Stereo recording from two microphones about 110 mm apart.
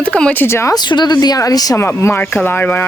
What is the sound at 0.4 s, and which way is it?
Speech, 25° left (ahead or behind).